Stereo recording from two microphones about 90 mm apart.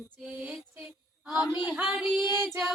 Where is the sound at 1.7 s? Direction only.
20° right (ahead or behind).